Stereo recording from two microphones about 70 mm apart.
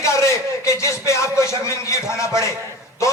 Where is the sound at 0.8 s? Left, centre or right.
Left.